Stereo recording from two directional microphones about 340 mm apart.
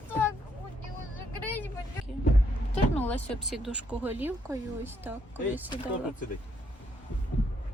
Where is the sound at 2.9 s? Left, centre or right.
Centre.